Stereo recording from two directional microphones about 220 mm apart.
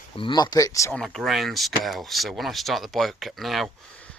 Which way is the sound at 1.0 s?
Centre (ahead or behind).